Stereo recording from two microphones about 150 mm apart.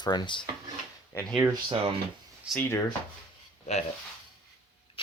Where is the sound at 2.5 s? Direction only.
15° left (ahead or behind).